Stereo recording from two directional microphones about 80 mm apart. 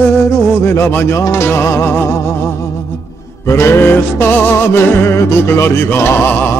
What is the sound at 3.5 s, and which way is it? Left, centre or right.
Music, left.